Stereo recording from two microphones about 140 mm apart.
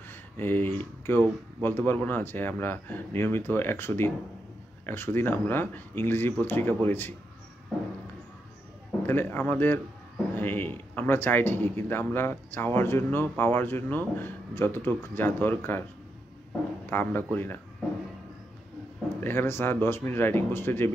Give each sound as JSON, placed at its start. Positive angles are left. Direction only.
{"t": 0.1, "sound": "speech", "side_deg": 15}
{"t": 9.0, "sound": "speech", "side_deg": 15}
{"t": 16.9, "sound": "speech", "side_deg": 15}
{"t": 19.2, "sound": "speech", "side_deg": 15}